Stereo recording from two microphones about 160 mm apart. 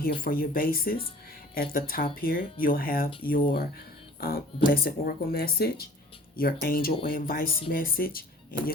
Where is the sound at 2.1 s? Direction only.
65° left (ahead or behind).